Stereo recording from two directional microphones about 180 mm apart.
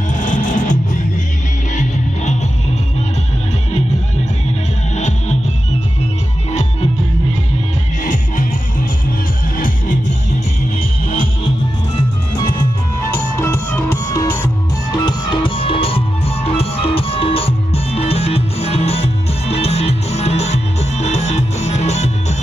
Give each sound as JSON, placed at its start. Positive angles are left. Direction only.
{"t": 0.1, "sound": "music", "side_deg": 45}
{"t": 8.0, "sound": "music", "side_deg": 45}
{"t": 9.6, "sound": "music", "side_deg": 45}
{"t": 13.4, "sound": "music", "side_deg": 15}
{"t": 15.0, "sound": "music", "side_deg": 25}